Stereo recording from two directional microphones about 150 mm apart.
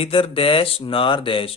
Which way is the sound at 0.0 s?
40° left (ahead or behind).